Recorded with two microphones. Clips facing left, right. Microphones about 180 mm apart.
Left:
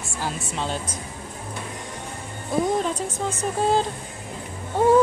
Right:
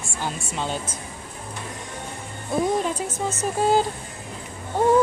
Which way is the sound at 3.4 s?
5° right (ahead or behind).